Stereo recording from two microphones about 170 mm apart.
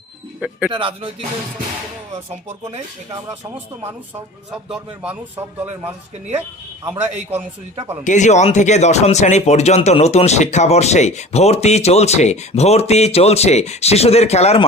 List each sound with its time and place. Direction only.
0.3 s speech: 10° right (ahead or behind)
0.7 s speech: 30° right (ahead or behind)
4.5 s speech: 5° right (ahead or behind)
6.8 s a man's voice: 15° right (ahead or behind)
8.0 s speech: 45° left (ahead or behind)